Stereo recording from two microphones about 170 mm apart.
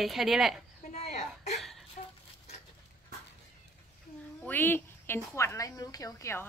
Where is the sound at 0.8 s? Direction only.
45° left (ahead or behind).